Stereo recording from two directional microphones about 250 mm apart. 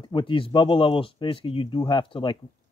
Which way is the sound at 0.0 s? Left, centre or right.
Centre.